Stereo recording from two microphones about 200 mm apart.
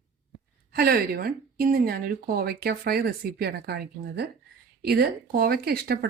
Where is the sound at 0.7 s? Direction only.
50° right (ahead or behind).